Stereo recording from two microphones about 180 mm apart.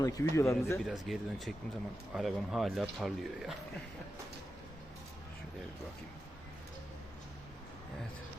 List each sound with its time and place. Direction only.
0.0 s a man's voice: 15° left (ahead or behind)
0.9 s speech: centre (ahead or behind)